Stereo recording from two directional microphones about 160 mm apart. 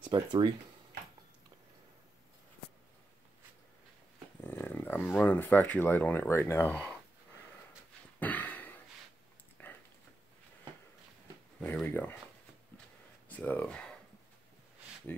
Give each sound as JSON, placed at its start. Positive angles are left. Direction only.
{"t": 0.0, "sound": "speech", "side_deg": -30}
{"t": 4.4, "sound": "speech", "side_deg": 15}
{"t": 8.2, "sound": "a sound", "side_deg": 10}
{"t": 9.6, "sound": "typing", "side_deg": 10}
{"t": 11.6, "sound": "speech", "side_deg": 10}
{"t": 13.3, "sound": "speech", "side_deg": 10}